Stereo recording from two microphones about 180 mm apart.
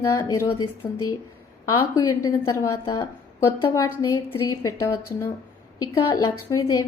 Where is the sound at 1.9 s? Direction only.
20° left (ahead or behind).